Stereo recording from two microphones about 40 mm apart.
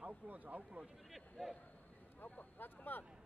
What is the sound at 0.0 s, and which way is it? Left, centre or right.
Speech, right.